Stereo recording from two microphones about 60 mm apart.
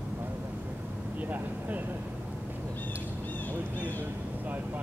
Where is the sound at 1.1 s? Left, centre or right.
Right.